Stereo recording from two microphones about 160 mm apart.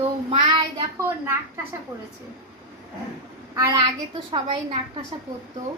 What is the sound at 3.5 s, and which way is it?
Speech, 20° right (ahead or behind).